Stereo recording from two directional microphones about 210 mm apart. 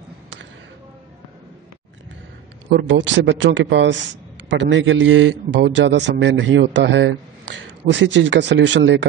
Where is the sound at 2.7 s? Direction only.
60° right (ahead or behind).